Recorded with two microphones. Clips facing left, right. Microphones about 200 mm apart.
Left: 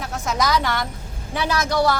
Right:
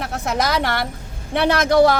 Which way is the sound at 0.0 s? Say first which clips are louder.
Right 2 dB; 60° right (ahead or behind).